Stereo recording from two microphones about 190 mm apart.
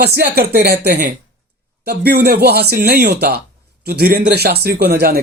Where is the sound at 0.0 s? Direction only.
55° right (ahead or behind).